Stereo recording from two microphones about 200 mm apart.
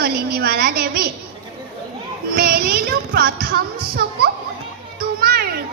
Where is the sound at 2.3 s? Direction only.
50° right (ahead or behind).